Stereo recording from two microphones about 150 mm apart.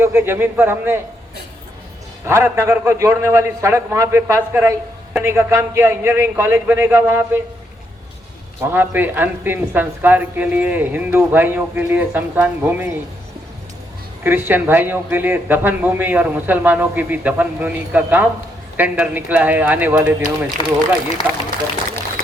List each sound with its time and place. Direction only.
0.0 s a man's voice: 15° right (ahead or behind)
2.2 s a man's voice: 15° right (ahead or behind)
8.6 s a man's voice: 15° right (ahead or behind)
14.3 s a man's voice: 15° right (ahead or behind)